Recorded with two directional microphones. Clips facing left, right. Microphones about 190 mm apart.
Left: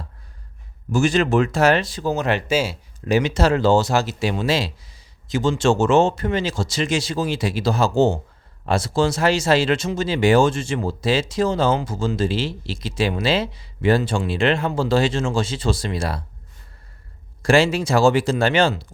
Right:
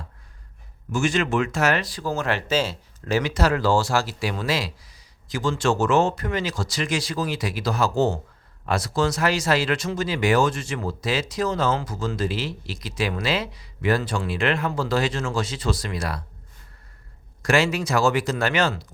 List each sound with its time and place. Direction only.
0.9 s speech: 35° left (ahead or behind)
17.4 s speech: 30° left (ahead or behind)